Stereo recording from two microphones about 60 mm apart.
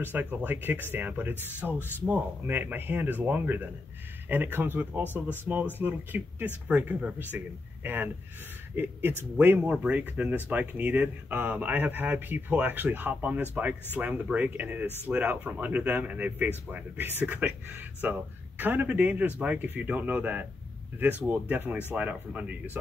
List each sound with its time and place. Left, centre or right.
0.0 s speech: right